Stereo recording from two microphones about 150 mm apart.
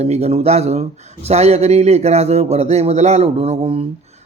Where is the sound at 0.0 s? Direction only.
45° right (ahead or behind).